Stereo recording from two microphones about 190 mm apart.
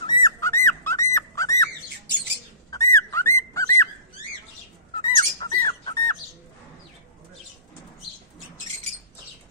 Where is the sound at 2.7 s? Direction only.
15° left (ahead or behind).